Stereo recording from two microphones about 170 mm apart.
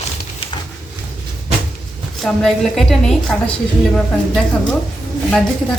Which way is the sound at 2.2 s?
Centre (ahead or behind).